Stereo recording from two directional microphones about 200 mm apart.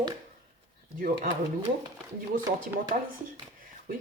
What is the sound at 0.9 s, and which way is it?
Speech, 45° right (ahead or behind).